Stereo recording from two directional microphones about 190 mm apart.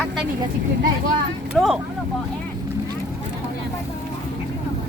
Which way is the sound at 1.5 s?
Centre (ahead or behind).